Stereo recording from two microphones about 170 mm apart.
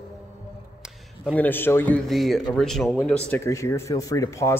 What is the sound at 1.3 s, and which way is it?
Speech, 10° left (ahead or behind).